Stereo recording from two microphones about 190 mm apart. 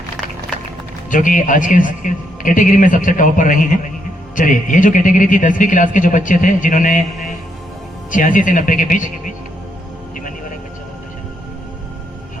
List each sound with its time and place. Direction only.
1.1 s a man's voice: 45° left (ahead or behind)